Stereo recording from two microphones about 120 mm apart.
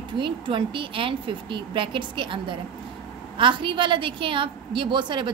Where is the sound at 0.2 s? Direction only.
45° right (ahead or behind).